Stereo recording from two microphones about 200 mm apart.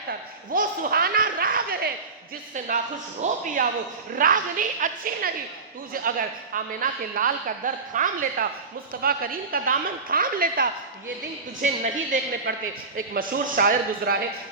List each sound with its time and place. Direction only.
0.5 s a man's voice: 45° right (ahead or behind)